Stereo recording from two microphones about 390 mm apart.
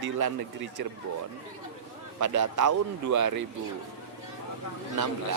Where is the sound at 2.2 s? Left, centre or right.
Right.